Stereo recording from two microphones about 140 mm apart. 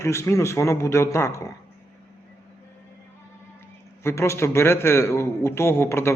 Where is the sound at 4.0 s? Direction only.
20° left (ahead or behind).